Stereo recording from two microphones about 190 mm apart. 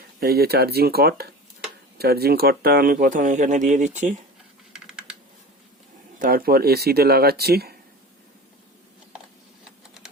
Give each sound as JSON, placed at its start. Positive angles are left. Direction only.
{"t": 0.2, "sound": "speech", "side_deg": -55}
{"t": 4.9, "sound": "computer keyboard", "side_deg": -5}
{"t": 6.1, "sound": "speech", "side_deg": -50}